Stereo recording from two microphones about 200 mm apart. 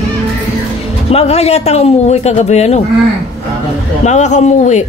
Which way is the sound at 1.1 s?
30° left (ahead or behind).